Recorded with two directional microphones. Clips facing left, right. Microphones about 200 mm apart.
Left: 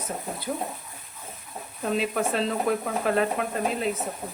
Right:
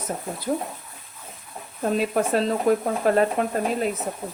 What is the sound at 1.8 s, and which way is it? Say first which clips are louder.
Speech: right 3 dB; 45° right (ahead or behind).